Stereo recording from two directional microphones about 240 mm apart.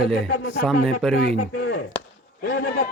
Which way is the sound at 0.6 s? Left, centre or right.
Centre.